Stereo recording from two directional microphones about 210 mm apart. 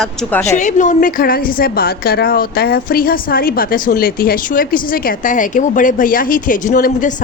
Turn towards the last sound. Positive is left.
turn(degrees=40)  # may be behind; listen again after turning